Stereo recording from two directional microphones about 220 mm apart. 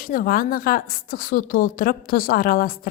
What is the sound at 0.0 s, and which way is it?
A woman's voice, 40° left (ahead or behind).